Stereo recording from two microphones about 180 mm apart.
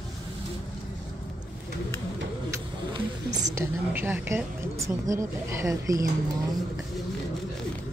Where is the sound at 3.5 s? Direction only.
10° right (ahead or behind).